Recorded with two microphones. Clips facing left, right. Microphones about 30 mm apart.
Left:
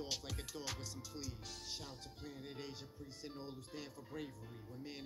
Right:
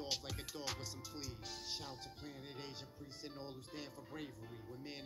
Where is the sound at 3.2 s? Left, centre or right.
Centre.